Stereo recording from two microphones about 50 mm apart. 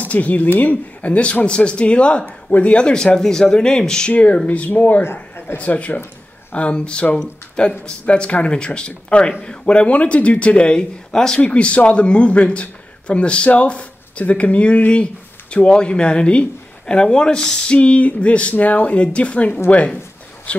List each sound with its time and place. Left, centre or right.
0.0 s speech: left; by 4.1 s centre
4.1 s speech: left
5.0 s speech: left
5.6 s speech: left